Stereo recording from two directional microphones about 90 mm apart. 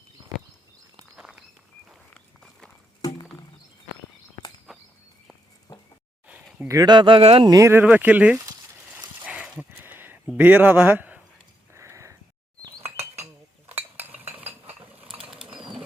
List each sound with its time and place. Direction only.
2.1 s walk: 5° left (ahead or behind)
3.0 s rowboat: 40° left (ahead or behind)
4.7 s walk: centre (ahead or behind)
6.2 s a sound: 15° right (ahead or behind)
6.8 s speech: 60° right (ahead or behind); by 7.4 s 90° right
7.4 s speech: 40° right (ahead or behind)
7.7 s speech: 20° right (ahead or behind)
8.9 s dog: 15° right (ahead or behind)
9.7 s a sound: 20° right (ahead or behind)
10.3 s speech: 15° right (ahead or behind)
11.7 s a sound: 35° right (ahead or behind)
13.7 s cutlery: 20° right (ahead or behind)
15.0 s bird flight: 85° right
15.3 s bird flight: 10° right (ahead or behind)